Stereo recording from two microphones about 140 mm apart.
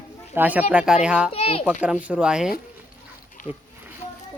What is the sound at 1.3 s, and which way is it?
Speech, 45° left (ahead or behind).